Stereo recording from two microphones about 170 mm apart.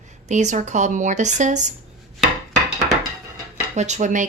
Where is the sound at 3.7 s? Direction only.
45° right (ahead or behind).